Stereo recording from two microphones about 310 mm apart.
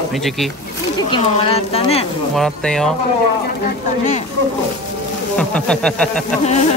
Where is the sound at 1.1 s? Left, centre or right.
Centre.